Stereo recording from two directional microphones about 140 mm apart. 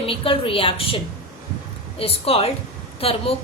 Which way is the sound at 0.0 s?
40° left (ahead or behind).